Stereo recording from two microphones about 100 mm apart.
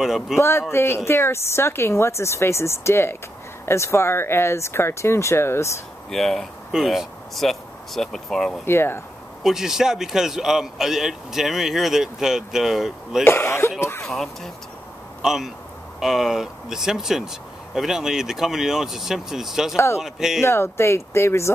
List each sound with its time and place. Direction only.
0.0 s a man's voice: 5° right (ahead or behind)
0.4 s a woman's voice: 25° left (ahead or behind)
6.0 s speech: 5° left (ahead or behind)
8.6 s a woman's voice: 25° left (ahead or behind)
9.4 s a man's voice: 5° right (ahead or behind)
13.2 s throat clearing: 25° left (ahead or behind)
14.0 s a man's voice: centre (ahead or behind)
20.4 s a woman's voice: 25° left (ahead or behind)